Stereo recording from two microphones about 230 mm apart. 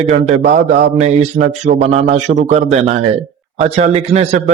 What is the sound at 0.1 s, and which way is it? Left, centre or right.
A man's voice, right.